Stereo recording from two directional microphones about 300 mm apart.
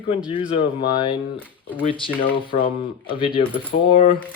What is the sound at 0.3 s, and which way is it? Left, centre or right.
Speech, centre.